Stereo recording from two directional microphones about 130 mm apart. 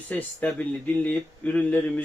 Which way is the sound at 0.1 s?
15° left (ahead or behind).